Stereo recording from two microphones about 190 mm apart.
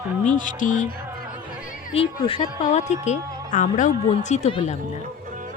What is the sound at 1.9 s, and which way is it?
A woman's voice, 30° left (ahead or behind).